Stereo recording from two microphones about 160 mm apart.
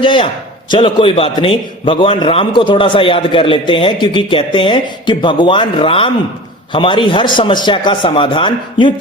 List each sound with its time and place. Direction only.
0.0 s a man's voice: 30° left (ahead or behind)